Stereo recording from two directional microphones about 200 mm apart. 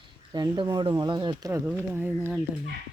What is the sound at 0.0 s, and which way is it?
Speech, 20° right (ahead or behind).